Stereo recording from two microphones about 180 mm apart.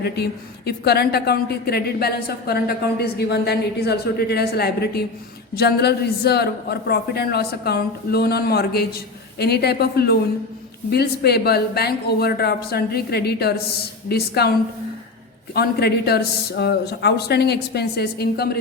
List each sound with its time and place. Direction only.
0.0 s a woman's voice: 65° left (ahead or behind)
15.5 s a woman's voice: 60° left (ahead or behind)